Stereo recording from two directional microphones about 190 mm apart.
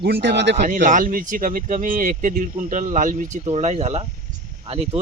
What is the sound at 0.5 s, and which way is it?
Speech, 40° right (ahead or behind).